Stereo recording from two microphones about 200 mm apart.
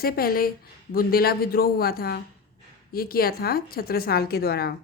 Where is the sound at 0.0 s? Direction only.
50° left (ahead or behind).